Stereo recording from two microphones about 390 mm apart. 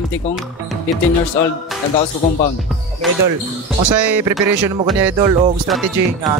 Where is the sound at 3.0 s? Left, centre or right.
Centre.